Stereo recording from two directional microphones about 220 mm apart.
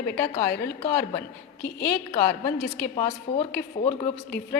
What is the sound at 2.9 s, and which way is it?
A woman's voice, 30° left (ahead or behind).